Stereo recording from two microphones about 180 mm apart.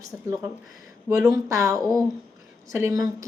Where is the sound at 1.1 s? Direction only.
20° right (ahead or behind).